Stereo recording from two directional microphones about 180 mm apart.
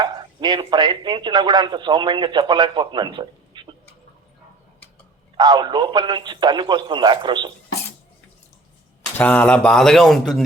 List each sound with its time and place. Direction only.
0.0 s speech: 25° right (ahead or behind)
5.4 s a man's voice: 25° right (ahead or behind)
9.1 s speech: 10° left (ahead or behind)